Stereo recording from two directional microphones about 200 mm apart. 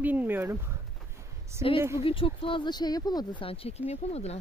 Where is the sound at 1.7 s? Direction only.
15° right (ahead or behind).